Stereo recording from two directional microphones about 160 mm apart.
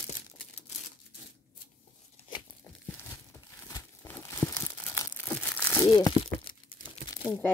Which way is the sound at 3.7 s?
15° left (ahead or behind).